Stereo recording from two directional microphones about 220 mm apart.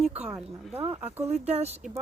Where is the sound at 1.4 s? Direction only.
30° right (ahead or behind).